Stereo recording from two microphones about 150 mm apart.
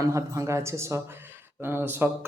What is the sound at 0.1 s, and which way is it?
Speech, 20° right (ahead or behind).